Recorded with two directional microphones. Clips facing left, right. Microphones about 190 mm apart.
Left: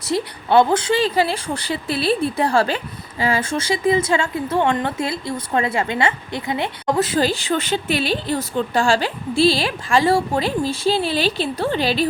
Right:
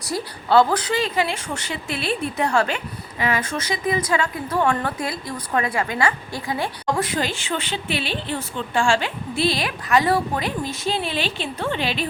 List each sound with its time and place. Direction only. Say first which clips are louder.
0.0 s a woman's voice: left 5 dB; 25° left (ahead or behind)